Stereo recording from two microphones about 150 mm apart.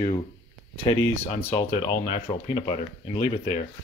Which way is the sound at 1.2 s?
40° left (ahead or behind).